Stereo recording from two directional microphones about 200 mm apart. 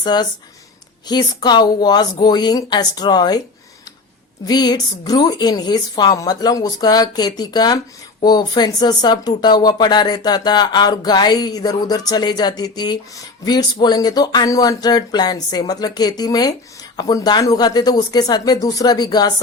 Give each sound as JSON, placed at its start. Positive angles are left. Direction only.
{"t": 0.0, "sound": "speech", "side_deg": 20}
{"t": 4.4, "sound": "speech", "side_deg": 20}